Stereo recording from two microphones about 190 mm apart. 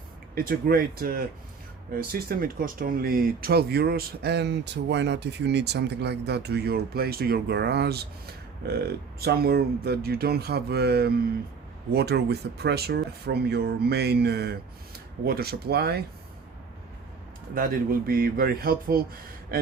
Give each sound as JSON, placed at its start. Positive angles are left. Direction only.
{"t": 0.3, "sound": "speech", "side_deg": -50}
{"t": 17.5, "sound": "speech", "side_deg": -50}